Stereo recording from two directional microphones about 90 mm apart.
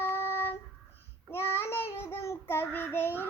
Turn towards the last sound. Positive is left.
turn(degrees=25)  # may be behind; listen again after turning